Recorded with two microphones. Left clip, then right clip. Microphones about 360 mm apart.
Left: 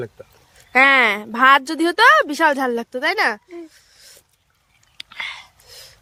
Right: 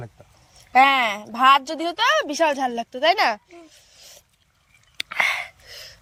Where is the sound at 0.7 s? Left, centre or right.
Centre.